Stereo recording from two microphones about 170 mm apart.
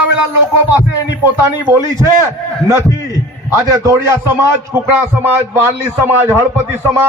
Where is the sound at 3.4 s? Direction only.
15° right (ahead or behind).